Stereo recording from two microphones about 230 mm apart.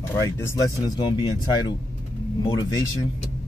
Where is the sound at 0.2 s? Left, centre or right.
Centre.